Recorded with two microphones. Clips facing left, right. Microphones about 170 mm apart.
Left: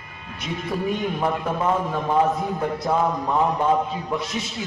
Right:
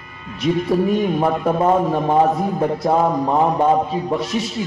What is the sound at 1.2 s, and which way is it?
A man's voice, 35° right (ahead or behind).